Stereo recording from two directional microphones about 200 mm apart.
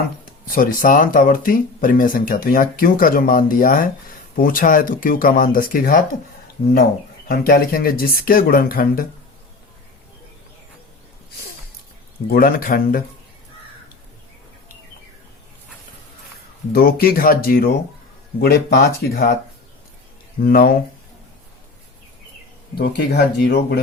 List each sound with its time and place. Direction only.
0.5 s speech: 45° left (ahead or behind)
7.3 s speech: 50° left (ahead or behind)
12.3 s speech: 45° left (ahead or behind)
16.7 s speech: 45° left (ahead or behind)
20.4 s speech: 45° left (ahead or behind)
22.8 s speech: 55° left (ahead or behind)